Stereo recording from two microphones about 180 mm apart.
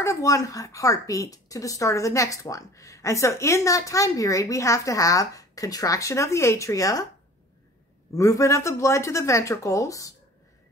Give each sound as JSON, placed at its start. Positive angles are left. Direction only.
{"t": 0.0, "sound": "a woman's voice", "side_deg": 15}
{"t": 8.1, "sound": "a woman's voice", "side_deg": 15}